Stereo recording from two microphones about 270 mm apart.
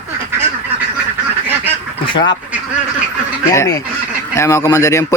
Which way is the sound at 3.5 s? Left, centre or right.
Centre.